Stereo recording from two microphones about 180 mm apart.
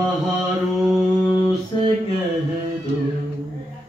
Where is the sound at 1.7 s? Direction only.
25° left (ahead or behind).